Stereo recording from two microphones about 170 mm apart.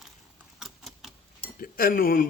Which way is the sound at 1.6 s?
60° left (ahead or behind).